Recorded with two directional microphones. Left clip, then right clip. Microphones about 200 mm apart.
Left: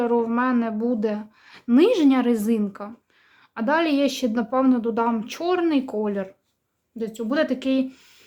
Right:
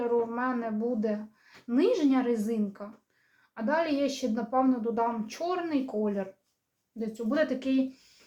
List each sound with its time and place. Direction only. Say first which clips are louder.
0.0 s a woman's voice: left 6 dB; 50° left (ahead or behind)